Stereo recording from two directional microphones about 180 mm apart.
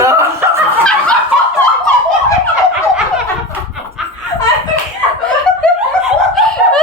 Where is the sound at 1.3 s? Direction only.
5° right (ahead or behind).